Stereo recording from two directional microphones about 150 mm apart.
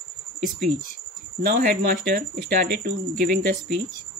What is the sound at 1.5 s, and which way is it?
Speech, 75° right (ahead or behind).